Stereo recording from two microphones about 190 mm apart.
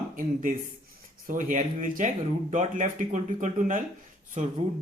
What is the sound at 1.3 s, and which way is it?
Speech, 45° right (ahead or behind).